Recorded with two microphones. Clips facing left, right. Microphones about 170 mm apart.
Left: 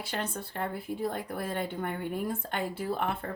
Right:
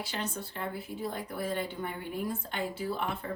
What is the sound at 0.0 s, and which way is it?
Speech, 50° left (ahead or behind).